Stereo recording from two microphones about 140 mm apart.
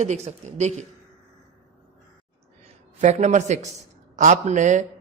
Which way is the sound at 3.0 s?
55° right (ahead or behind).